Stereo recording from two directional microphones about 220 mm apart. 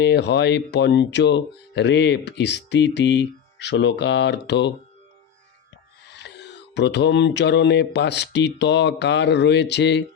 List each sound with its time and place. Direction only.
0.0 s speech: 50° left (ahead or behind)
6.1 s speech: 50° left (ahead or behind)